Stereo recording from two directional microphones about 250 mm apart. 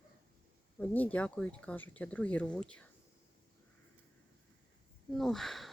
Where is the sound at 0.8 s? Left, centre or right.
Centre.